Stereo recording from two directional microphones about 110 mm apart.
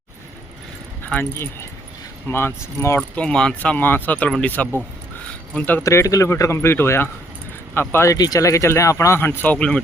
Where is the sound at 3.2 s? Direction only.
5° left (ahead or behind).